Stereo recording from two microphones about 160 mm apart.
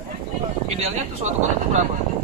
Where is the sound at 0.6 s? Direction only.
45° right (ahead or behind).